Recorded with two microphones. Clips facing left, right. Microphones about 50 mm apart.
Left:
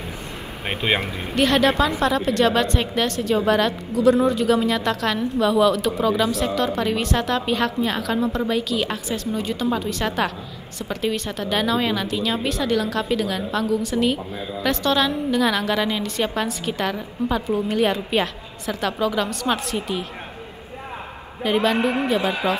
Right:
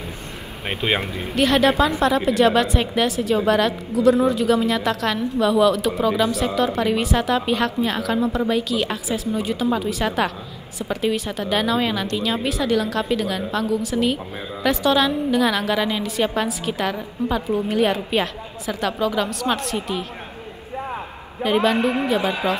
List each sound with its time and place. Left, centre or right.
0.8 s a woman's voice: centre
21.4 s a woman's voice: centre